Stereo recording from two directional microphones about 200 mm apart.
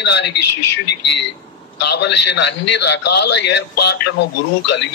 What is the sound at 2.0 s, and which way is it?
A man's voice, 60° left (ahead or behind).